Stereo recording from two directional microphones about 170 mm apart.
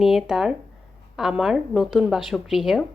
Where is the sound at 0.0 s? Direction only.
Centre (ahead or behind).